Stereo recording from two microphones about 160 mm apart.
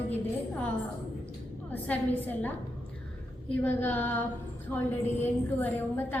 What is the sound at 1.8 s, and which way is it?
Speech, 10° left (ahead or behind).